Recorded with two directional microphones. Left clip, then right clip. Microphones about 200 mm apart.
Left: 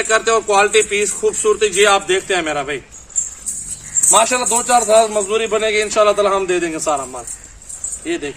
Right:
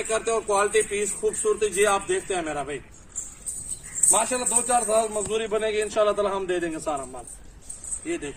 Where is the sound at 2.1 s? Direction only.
30° left (ahead or behind).